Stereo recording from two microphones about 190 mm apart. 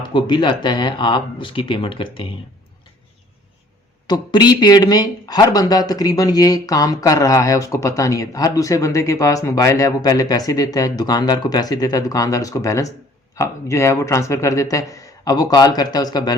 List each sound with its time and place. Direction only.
0.0 s speech: 25° left (ahead or behind)
4.0 s a man's voice: 20° left (ahead or behind)